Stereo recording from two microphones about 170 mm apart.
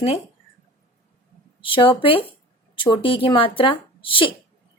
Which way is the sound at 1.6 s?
30° left (ahead or behind).